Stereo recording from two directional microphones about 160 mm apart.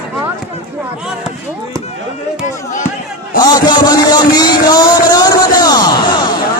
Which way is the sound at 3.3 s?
25° left (ahead or behind).